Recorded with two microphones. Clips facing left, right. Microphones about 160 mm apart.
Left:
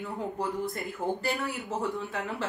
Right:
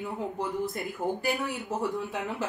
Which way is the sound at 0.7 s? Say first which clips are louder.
Right 1 dB; centre (ahead or behind).